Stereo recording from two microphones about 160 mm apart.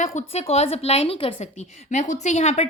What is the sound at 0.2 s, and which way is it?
Speech, 40° left (ahead or behind).